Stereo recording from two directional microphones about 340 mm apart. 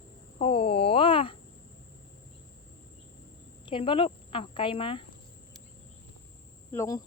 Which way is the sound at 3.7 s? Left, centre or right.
Centre.